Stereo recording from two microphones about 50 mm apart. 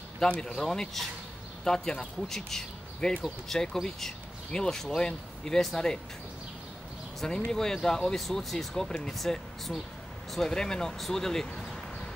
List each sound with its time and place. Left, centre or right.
0.3 s speech: centre
0.7 s speech: centre
7.2 s speech: centre